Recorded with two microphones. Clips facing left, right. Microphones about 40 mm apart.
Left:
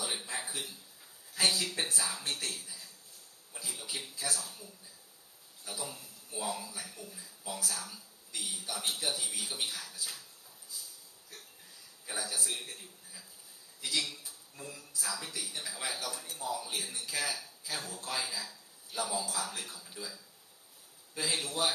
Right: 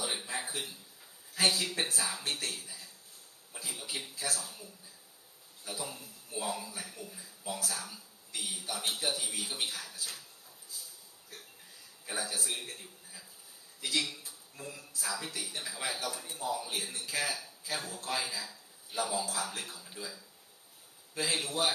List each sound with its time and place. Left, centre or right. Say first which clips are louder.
0.0 s a sound: right 1 dB; centre
1.3 s speech: right 1 dB; centre
12.0 s speech: right 1 dB; centre